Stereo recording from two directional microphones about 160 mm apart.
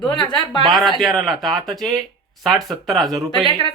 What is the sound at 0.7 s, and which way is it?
A man's voice, centre (ahead or behind).